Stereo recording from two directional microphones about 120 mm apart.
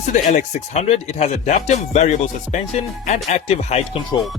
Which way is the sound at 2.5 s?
90° left.